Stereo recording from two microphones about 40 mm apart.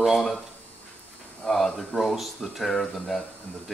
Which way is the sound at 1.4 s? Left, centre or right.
Centre.